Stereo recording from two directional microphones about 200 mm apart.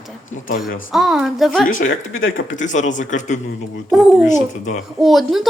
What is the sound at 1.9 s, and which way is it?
Speech, 75° left (ahead or behind).